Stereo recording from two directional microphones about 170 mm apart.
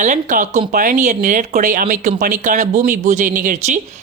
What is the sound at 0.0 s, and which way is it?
Speech, 50° right (ahead or behind).